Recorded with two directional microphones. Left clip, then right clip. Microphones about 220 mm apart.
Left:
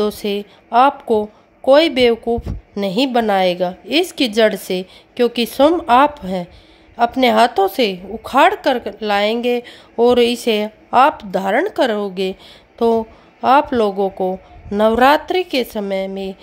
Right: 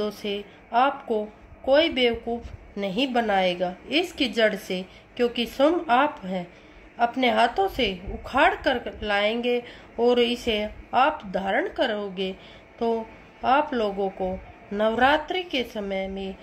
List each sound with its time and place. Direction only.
0.0 s a woman's voice: 50° left (ahead or behind)